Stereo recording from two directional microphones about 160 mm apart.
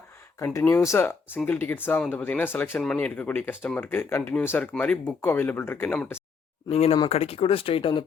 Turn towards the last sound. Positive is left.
turn(degrees=35)  # may be behind; listen again after turning